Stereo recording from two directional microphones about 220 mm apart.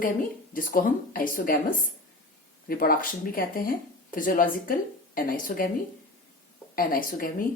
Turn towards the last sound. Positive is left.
turn(degrees=40)  # may be behind; listen again after turning